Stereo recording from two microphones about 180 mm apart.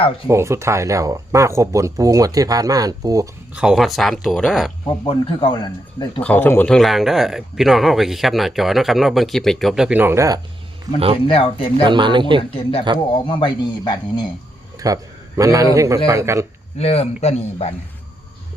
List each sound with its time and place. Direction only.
0.3 s speech: 15° right (ahead or behind)
3.5 s speech: 5° right (ahead or behind)
4.9 s speech: 25° left (ahead or behind)
6.2 s speech: 10° left (ahead or behind); by 11.0 s 20° right (ahead or behind)
11.3 s speech: 30° left (ahead or behind)
11.8 s speech: 25° right (ahead or behind)
13.1 s speech: 25° left (ahead or behind)
14.8 s speech: 20° right (ahead or behind)
16.7 s speech: 35° left (ahead or behind)